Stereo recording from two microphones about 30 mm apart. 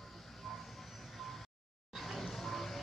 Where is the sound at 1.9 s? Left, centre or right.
Centre.